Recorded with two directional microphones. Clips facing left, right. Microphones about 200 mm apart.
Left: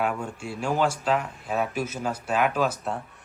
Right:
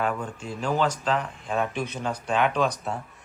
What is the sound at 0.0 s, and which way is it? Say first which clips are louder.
Speech: even; 10° left (ahead or behind).